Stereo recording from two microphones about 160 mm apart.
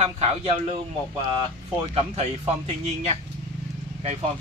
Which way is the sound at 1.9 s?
40° right (ahead or behind).